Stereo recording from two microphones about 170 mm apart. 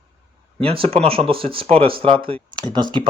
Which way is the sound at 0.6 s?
35° right (ahead or behind).